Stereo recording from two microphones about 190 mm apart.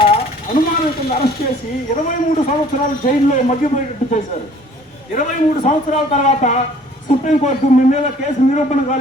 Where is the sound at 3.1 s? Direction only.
40° left (ahead or behind).